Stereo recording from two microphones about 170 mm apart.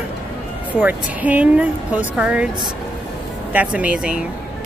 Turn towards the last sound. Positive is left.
turn(degrees=-5)  # may be behind; listen again after turning